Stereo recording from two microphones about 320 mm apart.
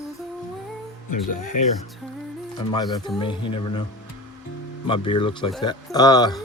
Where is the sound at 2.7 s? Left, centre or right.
Centre.